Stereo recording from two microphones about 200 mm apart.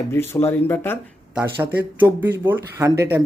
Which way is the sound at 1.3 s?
10° right (ahead or behind).